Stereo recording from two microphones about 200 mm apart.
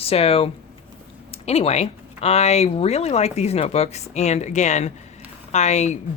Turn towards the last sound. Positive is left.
turn(degrees=35)  # may be behind; listen again after turning